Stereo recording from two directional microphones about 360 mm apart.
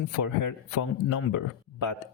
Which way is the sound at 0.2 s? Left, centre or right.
Left.